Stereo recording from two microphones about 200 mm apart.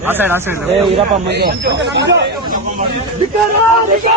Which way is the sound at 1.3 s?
55° right (ahead or behind).